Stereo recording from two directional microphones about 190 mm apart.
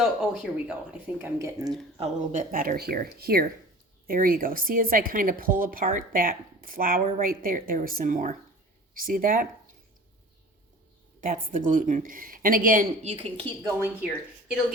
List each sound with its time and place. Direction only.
0.0 s speech: 5° right (ahead or behind)
2.0 s a woman's voice: 40° right (ahead or behind)
11.2 s a woman's voice: 45° right (ahead or behind)
13.7 s speech: 10° right (ahead or behind)